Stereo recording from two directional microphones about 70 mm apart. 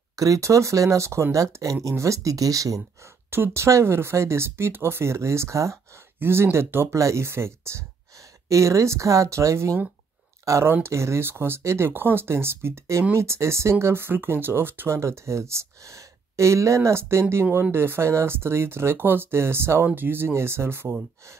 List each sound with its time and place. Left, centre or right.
0.1 s speech: right
3.3 s speech: right
6.1 s speech: right
10.6 s speech: right